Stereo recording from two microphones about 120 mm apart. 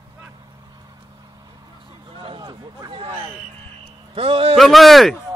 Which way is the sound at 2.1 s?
45° right (ahead or behind).